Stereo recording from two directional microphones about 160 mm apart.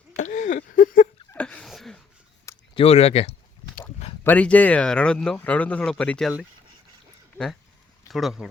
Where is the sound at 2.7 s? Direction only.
40° left (ahead or behind).